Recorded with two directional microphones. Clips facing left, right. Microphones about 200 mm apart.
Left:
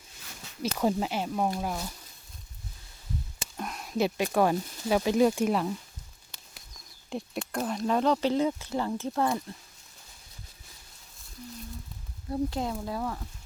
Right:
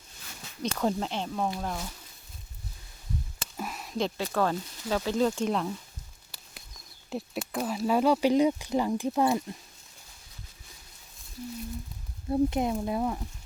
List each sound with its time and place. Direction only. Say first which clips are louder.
0.6 s speech: left 1 dB; 10° left (ahead or behind)
3.6 s speech: left 2 dB; centre (ahead or behind)
7.1 s speech: even; centre (ahead or behind)
12.3 s speech: right 4 dB; 20° right (ahead or behind)